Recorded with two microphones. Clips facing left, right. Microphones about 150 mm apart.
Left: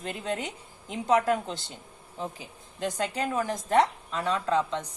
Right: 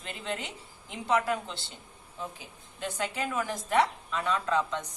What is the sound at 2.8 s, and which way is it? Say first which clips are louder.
A woman's voice: left 4 dB; 35° left (ahead or behind).